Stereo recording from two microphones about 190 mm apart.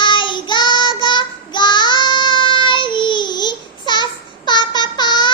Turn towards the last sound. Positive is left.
turn(degrees=25)  # may be behind; listen again after turning